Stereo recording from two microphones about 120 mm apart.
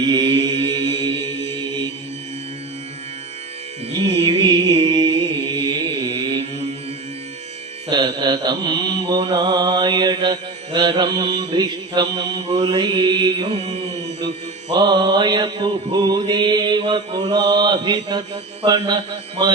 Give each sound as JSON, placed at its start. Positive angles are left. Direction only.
{"t": 0.0, "sound": "mantra", "side_deg": -40}
{"t": 3.9, "sound": "carnatic music", "side_deg": -55}
{"t": 4.4, "sound": "music", "side_deg": -35}
{"t": 4.9, "sound": "mantra", "side_deg": -40}
{"t": 7.9, "sound": "mantra", "side_deg": -35}
{"t": 13.5, "sound": "mantra", "side_deg": -55}
{"t": 14.7, "sound": "mantra", "side_deg": -35}
{"t": 18.6, "sound": "a man's voice", "side_deg": -45}